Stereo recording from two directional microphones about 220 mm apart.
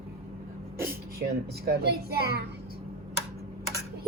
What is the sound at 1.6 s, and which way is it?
Speech, 45° right (ahead or behind).